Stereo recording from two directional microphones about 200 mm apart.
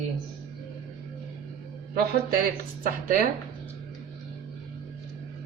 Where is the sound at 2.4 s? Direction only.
45° right (ahead or behind).